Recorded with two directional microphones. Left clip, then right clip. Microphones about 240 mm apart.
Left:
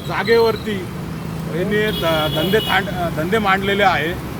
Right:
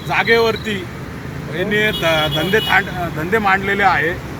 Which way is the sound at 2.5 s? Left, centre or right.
Centre.